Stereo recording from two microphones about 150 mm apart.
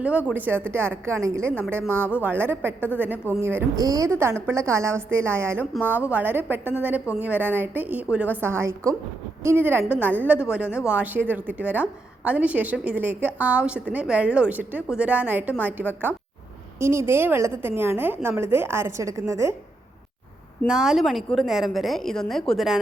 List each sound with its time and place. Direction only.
0.0 s a woman's voice: 10° right (ahead or behind)
3.8 s a woman's voice: 25° right (ahead or behind)
20.7 s a woman's voice: 5° right (ahead or behind)